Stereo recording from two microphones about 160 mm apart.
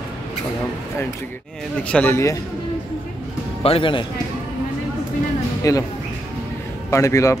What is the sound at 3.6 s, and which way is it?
Speech, 35° left (ahead or behind).